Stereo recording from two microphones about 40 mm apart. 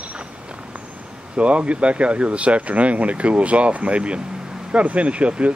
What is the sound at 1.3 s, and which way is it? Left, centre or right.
Speech, right.